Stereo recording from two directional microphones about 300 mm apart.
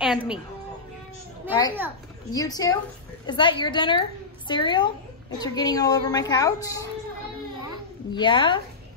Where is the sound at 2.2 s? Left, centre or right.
Centre.